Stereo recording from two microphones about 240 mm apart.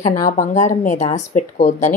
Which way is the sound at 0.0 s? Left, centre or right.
Left.